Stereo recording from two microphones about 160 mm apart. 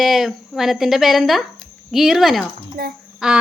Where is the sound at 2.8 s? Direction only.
70° right (ahead or behind).